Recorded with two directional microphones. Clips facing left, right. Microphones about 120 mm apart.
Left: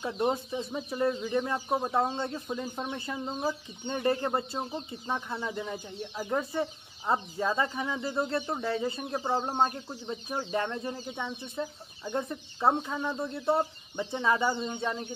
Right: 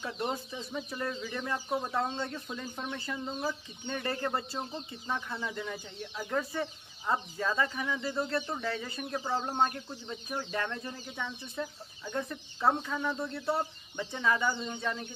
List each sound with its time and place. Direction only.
0.0 s speech: 25° left (ahead or behind)